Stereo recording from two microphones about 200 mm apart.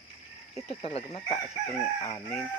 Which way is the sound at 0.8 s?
30° left (ahead or behind).